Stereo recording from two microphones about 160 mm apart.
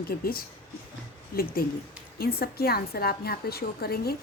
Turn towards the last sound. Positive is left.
turn(degrees=75)  # may be behind; listen again after turning